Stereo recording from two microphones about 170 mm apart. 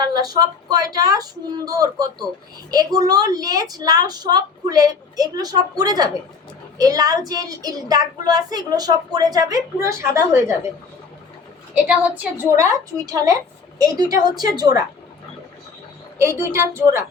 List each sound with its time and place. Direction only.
0.0 s speech: 25° right (ahead or behind)
11.9 s a woman's voice: 10° right (ahead or behind)
16.4 s a woman's voice: 15° right (ahead or behind)